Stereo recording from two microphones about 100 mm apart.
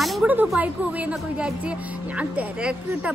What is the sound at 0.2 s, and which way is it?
A woman's voice, 15° right (ahead or behind).